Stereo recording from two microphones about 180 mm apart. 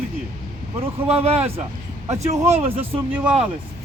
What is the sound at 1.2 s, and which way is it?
Speech, 35° right (ahead or behind).